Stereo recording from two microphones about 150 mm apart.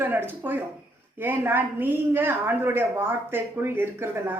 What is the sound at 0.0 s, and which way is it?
Speech, 15° right (ahead or behind).